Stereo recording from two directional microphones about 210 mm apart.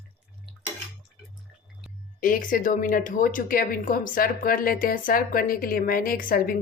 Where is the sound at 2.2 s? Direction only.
40° left (ahead or behind).